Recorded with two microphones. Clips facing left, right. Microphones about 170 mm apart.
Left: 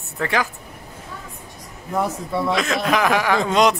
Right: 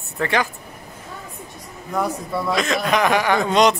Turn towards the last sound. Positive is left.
turn(degrees=0)  # may be behind; listen again after turning